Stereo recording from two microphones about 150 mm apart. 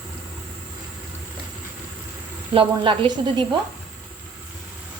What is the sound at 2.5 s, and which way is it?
Speech, 35° right (ahead or behind).